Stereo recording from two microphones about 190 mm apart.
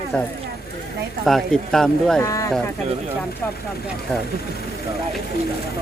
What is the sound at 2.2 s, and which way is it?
Speech, 15° left (ahead or behind).